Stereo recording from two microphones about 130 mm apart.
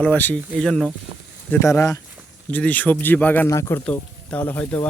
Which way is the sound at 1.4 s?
20° left (ahead or behind).